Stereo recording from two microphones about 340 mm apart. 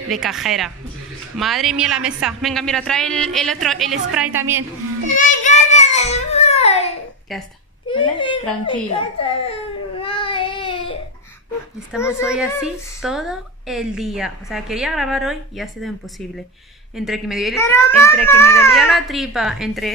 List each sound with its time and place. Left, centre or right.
0.1 s speech: centre
5.2 s a sound: left
7.9 s speech: centre
9.2 s baby cry: centre
11.9 s speech: centre
16.9 s speech: centre